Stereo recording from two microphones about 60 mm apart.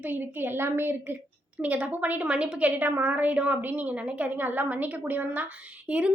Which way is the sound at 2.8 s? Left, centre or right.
Right.